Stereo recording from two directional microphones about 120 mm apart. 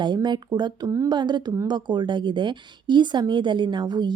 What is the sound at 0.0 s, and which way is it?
Speech, 40° right (ahead or behind).